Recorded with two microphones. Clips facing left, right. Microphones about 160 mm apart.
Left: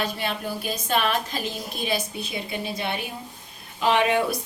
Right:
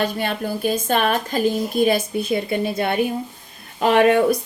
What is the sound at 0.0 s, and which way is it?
A woman's voice, 45° right (ahead or behind).